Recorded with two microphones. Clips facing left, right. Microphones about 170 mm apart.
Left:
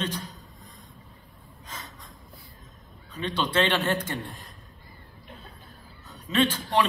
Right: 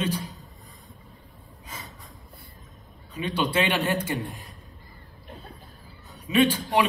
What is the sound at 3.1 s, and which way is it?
A man's voice, 10° right (ahead or behind).